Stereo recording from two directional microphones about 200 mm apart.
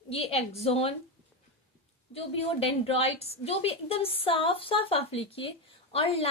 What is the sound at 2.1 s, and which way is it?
A woman's voice, 30° left (ahead or behind).